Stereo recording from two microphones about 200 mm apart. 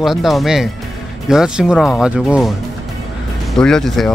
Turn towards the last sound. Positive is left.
turn(degrees=0)  # may be behind; listen again after turning